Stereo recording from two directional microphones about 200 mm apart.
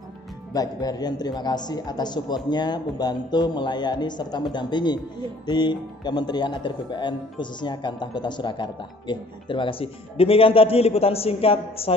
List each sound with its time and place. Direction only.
0.5 s speech: 20° left (ahead or behind)